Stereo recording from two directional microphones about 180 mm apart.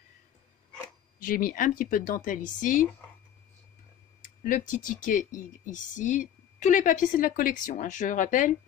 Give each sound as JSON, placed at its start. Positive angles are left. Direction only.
{"t": 1.2, "sound": "speech", "side_deg": 50}
{"t": 4.2, "sound": "speech", "side_deg": 45}